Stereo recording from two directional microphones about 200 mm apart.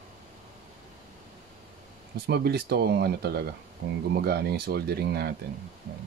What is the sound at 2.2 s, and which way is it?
Speech, 50° right (ahead or behind).